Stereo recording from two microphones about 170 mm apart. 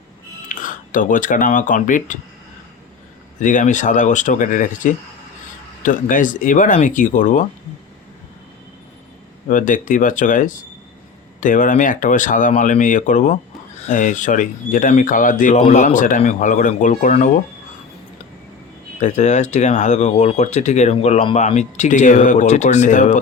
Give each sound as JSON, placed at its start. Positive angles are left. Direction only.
{"t": 0.4, "sound": "speech", "side_deg": 50}
{"t": 3.4, "sound": "speech", "side_deg": 50}
{"t": 9.5, "sound": "speech", "side_deg": 50}
{"t": 18.9, "sound": "speech", "side_deg": 45}